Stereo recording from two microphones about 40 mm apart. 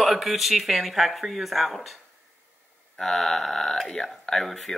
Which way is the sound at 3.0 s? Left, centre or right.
Centre.